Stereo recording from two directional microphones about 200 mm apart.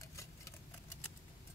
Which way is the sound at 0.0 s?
15° left (ahead or behind).